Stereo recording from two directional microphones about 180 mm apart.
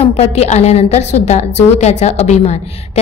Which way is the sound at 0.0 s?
35° left (ahead or behind).